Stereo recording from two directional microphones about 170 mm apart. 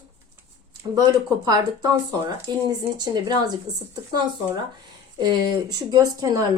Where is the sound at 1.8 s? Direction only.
20° right (ahead or behind).